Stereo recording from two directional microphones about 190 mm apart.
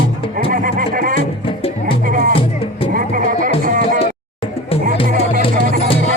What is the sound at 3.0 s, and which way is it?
Music, 45° right (ahead or behind).